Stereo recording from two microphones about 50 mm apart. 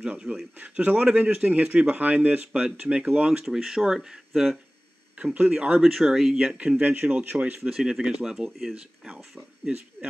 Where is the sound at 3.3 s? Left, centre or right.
Centre.